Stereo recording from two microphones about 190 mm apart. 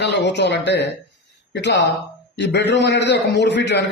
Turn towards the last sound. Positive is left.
turn(degrees=65)  # may be behind; listen again after turning